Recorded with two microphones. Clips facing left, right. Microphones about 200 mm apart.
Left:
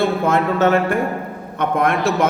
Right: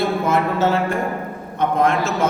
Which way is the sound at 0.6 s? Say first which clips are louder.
Left 3 dB; 60° left (ahead or behind).